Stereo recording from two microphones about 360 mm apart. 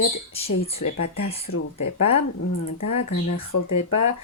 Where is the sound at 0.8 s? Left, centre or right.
Left.